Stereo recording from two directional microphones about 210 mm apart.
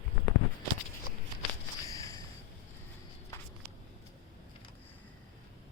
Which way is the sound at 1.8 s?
15° left (ahead or behind).